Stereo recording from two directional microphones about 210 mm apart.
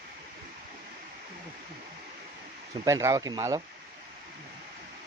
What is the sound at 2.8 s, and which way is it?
Speech, 15° right (ahead or behind).